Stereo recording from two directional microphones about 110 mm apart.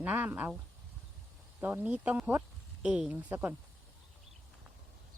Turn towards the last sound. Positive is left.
turn(degrees=-15)  # may be behind; listen again after turning